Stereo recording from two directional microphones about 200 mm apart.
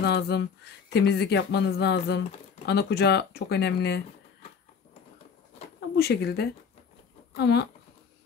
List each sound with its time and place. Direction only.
0.0 s speech: 55° left (ahead or behind)
5.8 s speech: 55° left (ahead or behind)